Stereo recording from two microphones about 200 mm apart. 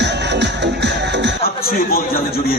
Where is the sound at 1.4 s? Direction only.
50° left (ahead or behind).